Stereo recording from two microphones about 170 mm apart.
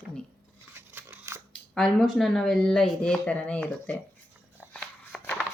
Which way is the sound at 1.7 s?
Centre (ahead or behind).